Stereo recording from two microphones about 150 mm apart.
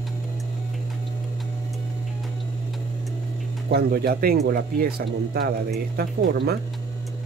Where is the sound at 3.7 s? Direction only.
90° right.